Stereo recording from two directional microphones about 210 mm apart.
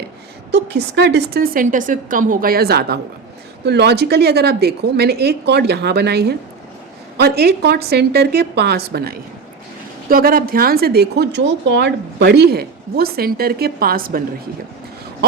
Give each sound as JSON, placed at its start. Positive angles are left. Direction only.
{"t": 0.5, "sound": "speech", "side_deg": -55}